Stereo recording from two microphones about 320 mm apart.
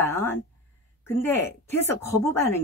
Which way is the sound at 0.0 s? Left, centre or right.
Centre.